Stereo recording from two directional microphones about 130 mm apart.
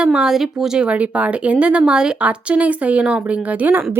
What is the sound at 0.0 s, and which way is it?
Speech, 5° right (ahead or behind).